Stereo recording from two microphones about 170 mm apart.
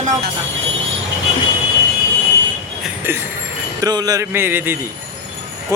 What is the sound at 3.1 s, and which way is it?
Speech, 15° right (ahead or behind).